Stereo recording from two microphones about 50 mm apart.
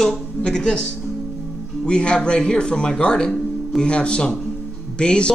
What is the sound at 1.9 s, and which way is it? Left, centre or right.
Speech, centre.